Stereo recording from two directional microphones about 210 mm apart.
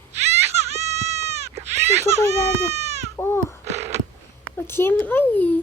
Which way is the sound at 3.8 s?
30° right (ahead or behind).